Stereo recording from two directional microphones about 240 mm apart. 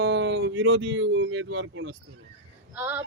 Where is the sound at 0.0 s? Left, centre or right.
Right.